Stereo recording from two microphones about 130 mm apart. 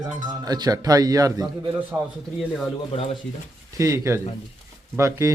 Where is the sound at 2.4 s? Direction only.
Centre (ahead or behind).